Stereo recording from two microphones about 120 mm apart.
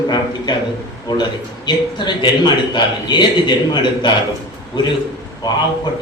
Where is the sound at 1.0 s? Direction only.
35° left (ahead or behind).